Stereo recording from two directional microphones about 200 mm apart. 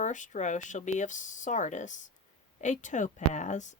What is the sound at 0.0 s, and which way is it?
Speech, 40° left (ahead or behind).